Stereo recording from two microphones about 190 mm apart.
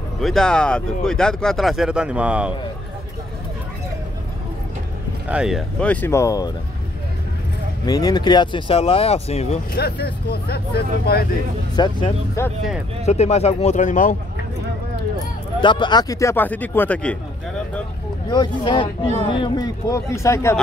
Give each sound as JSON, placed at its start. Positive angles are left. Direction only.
{"t": 0.2, "sound": "speech", "side_deg": 0}
{"t": 5.3, "sound": "speech", "side_deg": -5}
{"t": 5.8, "sound": "speech", "side_deg": 10}
{"t": 7.8, "sound": "speech", "side_deg": 20}
{"t": 9.8, "sound": "speech", "side_deg": 55}
{"t": 11.7, "sound": "speech", "side_deg": 20}
{"t": 13.0, "sound": "speech", "side_deg": 35}
{"t": 15.6, "sound": "speech", "side_deg": 25}
{"t": 18.3, "sound": "speech", "side_deg": 25}